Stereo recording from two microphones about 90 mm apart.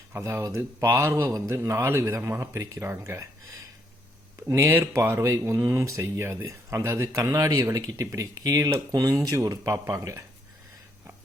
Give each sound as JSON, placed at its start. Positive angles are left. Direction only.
{"t": 0.1, "sound": "speech", "side_deg": -30}
{"t": 0.9, "sound": "a man's voice", "side_deg": -30}
{"t": 4.4, "sound": "speech", "side_deg": -35}